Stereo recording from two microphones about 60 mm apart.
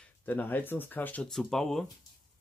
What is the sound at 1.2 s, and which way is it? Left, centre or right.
Speech, centre.